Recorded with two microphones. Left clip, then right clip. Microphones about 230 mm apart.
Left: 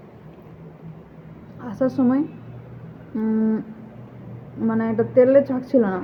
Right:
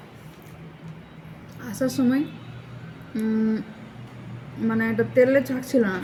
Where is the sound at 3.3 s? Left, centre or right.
Right.